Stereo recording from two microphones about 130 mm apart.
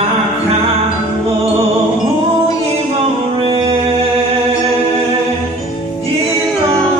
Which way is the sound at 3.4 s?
45° right (ahead or behind).